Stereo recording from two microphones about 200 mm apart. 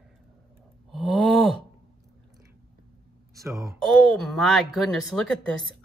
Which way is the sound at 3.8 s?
Centre (ahead or behind).